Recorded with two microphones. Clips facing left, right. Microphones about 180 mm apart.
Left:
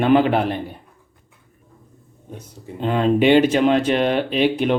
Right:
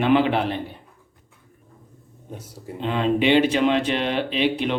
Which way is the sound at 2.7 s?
45° left (ahead or behind).